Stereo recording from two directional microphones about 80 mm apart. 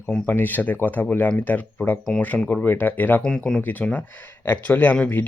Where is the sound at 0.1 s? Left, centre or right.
Left.